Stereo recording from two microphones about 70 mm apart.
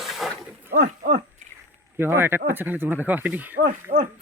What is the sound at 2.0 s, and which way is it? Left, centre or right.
Speech, right.